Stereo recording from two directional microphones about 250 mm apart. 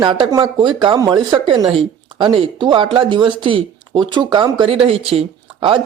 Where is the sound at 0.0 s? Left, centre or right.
Centre.